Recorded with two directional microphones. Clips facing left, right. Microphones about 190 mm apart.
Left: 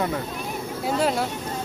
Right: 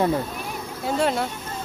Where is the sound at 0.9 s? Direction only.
5° left (ahead or behind).